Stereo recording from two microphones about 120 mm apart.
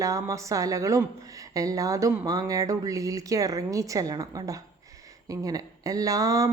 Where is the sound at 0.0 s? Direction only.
30° right (ahead or behind).